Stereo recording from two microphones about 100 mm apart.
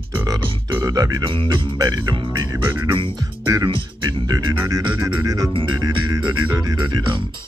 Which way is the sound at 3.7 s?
60° right (ahead or behind).